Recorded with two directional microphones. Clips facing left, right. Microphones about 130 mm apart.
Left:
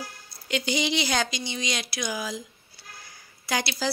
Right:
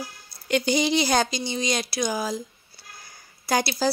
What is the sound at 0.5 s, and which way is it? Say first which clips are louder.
Speech: right 5 dB; 45° right (ahead or behind).